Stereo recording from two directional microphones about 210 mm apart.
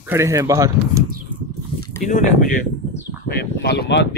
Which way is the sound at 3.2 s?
50° left (ahead or behind).